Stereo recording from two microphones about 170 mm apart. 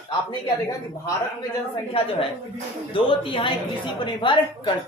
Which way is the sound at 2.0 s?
30° left (ahead or behind).